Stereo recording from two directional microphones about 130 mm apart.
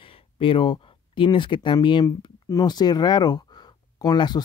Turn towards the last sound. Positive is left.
turn(degrees=35)  # may be behind; listen again after turning